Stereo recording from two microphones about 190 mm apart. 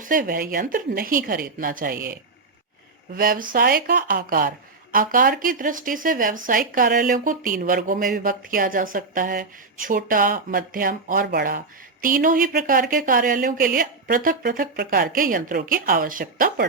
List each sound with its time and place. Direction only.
0.0 s speech: 45° right (ahead or behind)
3.2 s speech: 45° right (ahead or behind)